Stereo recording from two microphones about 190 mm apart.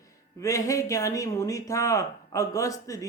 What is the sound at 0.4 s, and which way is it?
Speech, 15° left (ahead or behind).